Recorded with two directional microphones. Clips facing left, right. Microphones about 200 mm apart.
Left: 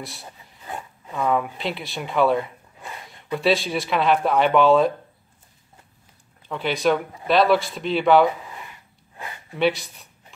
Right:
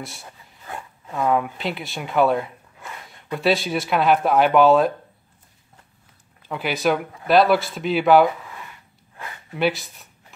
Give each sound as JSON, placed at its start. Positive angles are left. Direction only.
{"t": 0.0, "sound": "speech", "side_deg": 0}
{"t": 6.5, "sound": "speech", "side_deg": -5}
{"t": 9.6, "sound": "speech", "side_deg": 0}